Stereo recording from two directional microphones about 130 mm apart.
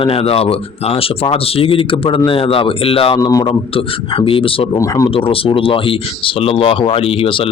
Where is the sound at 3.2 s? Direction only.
25° left (ahead or behind).